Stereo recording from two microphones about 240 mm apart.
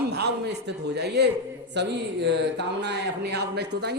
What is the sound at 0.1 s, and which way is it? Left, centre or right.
A man's voice, right.